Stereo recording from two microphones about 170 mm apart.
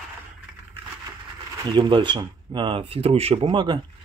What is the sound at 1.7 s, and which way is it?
Speech, 25° right (ahead or behind).